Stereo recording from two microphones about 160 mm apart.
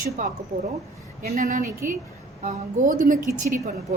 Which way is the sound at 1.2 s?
60° right (ahead or behind).